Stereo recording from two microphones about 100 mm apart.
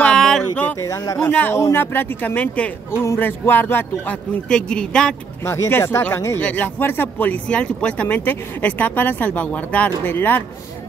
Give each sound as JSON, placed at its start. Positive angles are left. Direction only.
{"t": 0.0, "sound": "a sound", "side_deg": 5}
{"t": 0.7, "sound": "speech", "side_deg": 35}
{"t": 1.3, "sound": "speech", "side_deg": 15}
{"t": 2.9, "sound": "speech", "side_deg": 25}
{"t": 4.5, "sound": "speech", "side_deg": 10}
{"t": 5.4, "sound": "speech", "side_deg": 25}